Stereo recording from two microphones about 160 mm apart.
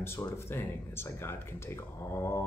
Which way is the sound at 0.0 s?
15° left (ahead or behind).